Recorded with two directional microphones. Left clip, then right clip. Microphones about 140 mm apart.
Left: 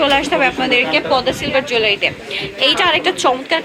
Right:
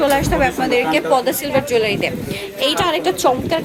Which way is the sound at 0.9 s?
45° right (ahead or behind).